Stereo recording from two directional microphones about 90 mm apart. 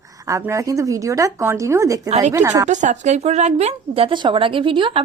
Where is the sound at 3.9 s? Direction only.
70° right (ahead or behind).